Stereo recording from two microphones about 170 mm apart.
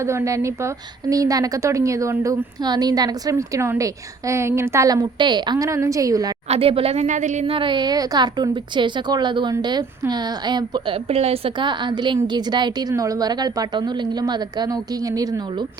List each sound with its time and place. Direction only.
0.0 s speech: 15° right (ahead or behind)
6.5 s speech: 35° right (ahead or behind)